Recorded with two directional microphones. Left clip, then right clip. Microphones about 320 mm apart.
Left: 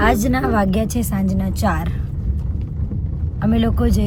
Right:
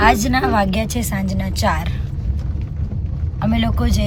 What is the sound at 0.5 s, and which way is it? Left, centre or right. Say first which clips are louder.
Speech: right 1 dB; centre.